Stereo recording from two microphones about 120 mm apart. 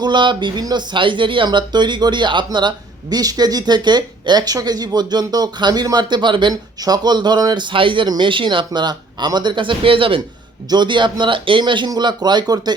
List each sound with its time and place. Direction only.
0.0 s speech: 40° right (ahead or behind)